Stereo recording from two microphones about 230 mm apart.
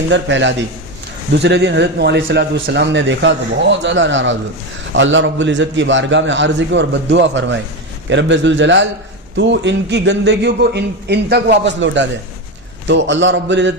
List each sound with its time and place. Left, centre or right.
0.1 s a man's voice: right